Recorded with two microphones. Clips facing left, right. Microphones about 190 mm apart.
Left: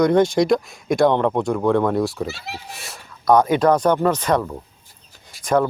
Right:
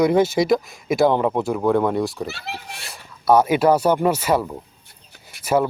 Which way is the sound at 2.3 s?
60° right (ahead or behind).